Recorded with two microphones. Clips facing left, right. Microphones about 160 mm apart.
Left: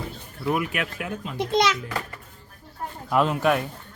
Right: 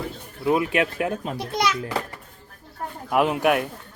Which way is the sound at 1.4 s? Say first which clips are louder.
Left 5 dB; 25° left (ahead or behind).